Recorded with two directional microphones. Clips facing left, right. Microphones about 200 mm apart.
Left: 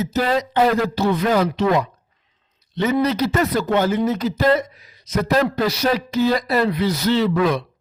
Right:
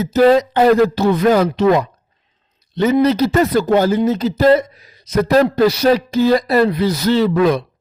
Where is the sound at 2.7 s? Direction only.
30° right (ahead or behind).